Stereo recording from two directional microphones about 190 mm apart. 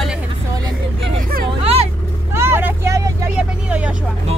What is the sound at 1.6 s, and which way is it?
Vehicle, 30° right (ahead or behind).